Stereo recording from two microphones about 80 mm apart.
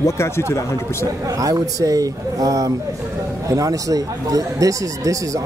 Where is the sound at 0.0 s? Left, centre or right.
Left.